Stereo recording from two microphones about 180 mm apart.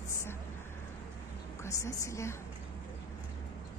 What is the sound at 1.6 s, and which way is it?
Speech, 15° left (ahead or behind).